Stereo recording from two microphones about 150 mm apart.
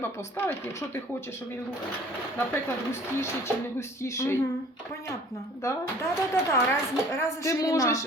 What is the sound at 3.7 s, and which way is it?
Speech, 20° left (ahead or behind).